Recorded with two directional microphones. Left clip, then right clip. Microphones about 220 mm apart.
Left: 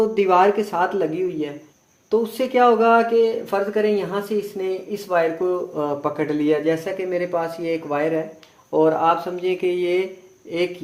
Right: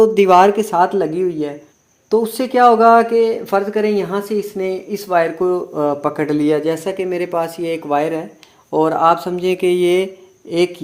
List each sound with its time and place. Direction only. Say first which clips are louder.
0.0 s speech: right 6 dB; 40° right (ahead or behind)